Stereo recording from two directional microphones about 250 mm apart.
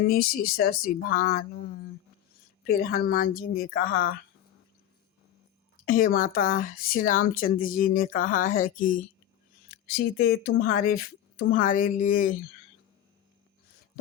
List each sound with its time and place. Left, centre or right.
0.0 s speech: left
2.8 s speech: left
5.8 s speech: left